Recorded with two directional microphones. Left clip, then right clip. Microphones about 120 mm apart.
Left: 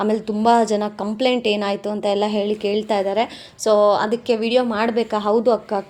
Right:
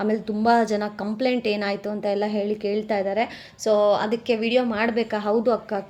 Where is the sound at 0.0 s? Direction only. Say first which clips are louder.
Left 4 dB; 40° left (ahead or behind).